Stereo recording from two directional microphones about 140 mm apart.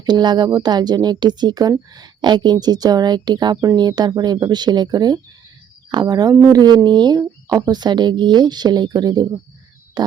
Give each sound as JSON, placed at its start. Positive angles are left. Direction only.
{"t": 0.0, "sound": "speech", "side_deg": -30}